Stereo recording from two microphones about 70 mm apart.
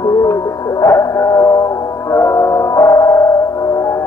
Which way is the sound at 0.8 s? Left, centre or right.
Left.